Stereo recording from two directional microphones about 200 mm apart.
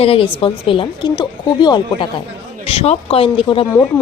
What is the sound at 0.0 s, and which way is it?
A woman's voice, 30° left (ahead or behind).